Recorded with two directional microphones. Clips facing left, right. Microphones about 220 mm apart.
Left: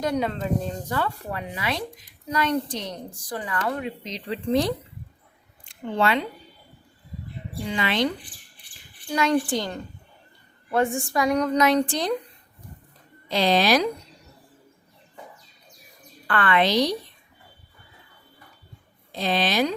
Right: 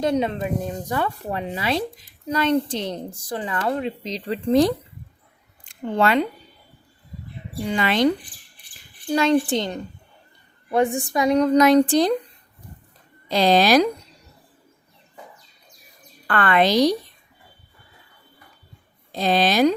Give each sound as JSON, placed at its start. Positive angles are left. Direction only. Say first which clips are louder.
{"t": 0.0, "sound": "speech", "louder": "right 4 dB", "side_deg": -25}
{"t": 6.0, "sound": "a woman's voice", "louder": "right 4 dB", "side_deg": -45}
{"t": 7.7, "sound": "a woman's voice", "louder": "right 4 dB", "side_deg": -45}
{"t": 9.0, "sound": "a child's voice", "louder": "right 4 dB", "side_deg": -30}
{"t": 13.3, "sound": "speech", "louder": "right 4 dB", "side_deg": -40}
{"t": 16.2, "sound": "a woman's voice", "louder": "right 3 dB", "side_deg": -45}
{"t": 19.1, "sound": "a woman's voice", "louder": "right 4 dB", "side_deg": -40}